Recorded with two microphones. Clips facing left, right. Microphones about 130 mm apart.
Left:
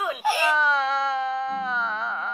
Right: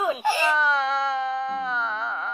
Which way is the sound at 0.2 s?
5° left (ahead or behind).